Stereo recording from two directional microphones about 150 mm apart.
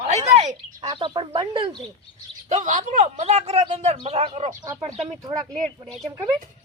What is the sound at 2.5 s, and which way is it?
A woman's voice, 55° right (ahead or behind).